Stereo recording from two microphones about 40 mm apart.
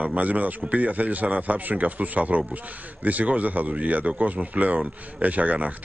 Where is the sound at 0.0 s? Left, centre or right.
Right.